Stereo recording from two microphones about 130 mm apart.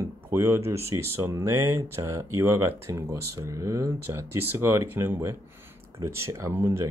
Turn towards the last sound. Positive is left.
turn(degrees=-20)  # may be behind; listen again after turning